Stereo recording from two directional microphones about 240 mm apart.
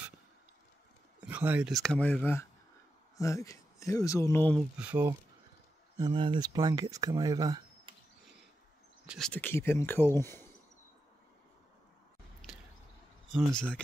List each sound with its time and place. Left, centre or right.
1.2 s speech: centre
4.6 s speech: centre
5.9 s speech: centre
9.0 s speech: centre
12.4 s a sound: centre
13.3 s speech: centre